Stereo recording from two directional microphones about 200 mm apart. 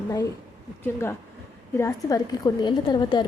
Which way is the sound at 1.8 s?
20° left (ahead or behind).